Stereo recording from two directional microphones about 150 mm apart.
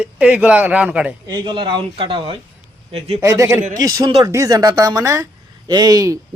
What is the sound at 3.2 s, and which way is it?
A man's voice, 20° right (ahead or behind).